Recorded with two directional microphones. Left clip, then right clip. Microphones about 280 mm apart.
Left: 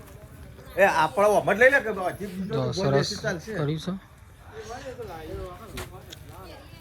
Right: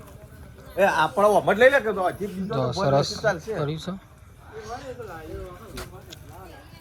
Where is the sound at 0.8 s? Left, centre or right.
Left.